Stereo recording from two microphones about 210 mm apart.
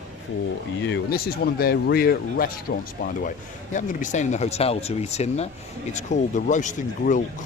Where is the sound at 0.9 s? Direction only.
50° left (ahead or behind).